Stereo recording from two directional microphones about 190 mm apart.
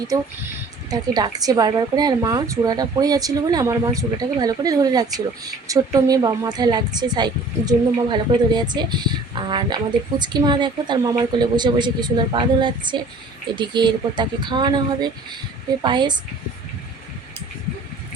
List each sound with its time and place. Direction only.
0.9 s speech: 20° right (ahead or behind)